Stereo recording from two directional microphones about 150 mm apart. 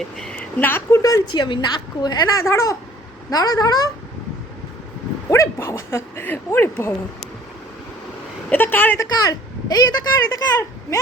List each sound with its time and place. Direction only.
0.2 s a woman's voice: 10° left (ahead or behind); by 3.8 s 25° left (ahead or behind)
5.3 s speech: 20° left (ahead or behind)
8.4 s speech: 15° left (ahead or behind)
9.2 s speech: 25° left (ahead or behind)